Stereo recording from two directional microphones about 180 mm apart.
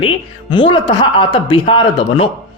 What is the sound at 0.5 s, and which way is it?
Speech, 25° left (ahead or behind).